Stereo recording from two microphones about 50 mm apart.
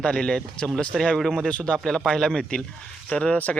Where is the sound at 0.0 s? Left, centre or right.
Centre.